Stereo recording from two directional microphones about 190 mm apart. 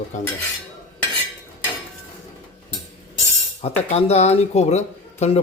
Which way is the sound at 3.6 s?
35° left (ahead or behind).